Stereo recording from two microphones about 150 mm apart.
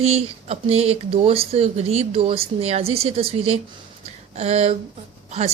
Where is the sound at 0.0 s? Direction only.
45° right (ahead or behind).